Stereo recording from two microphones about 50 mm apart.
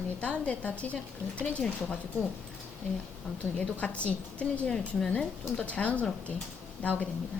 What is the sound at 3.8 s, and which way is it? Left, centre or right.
Speech, left.